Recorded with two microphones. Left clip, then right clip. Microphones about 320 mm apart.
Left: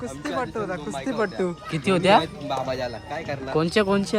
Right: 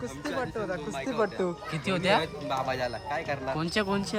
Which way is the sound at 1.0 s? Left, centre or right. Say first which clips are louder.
Left 3 dB; left.